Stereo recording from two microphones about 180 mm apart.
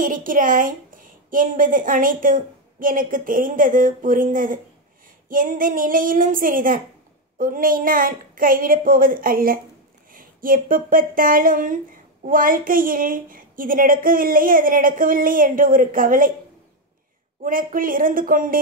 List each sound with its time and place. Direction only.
0.0 s speech: 50° right (ahead or behind)
17.5 s speech: 50° right (ahead or behind)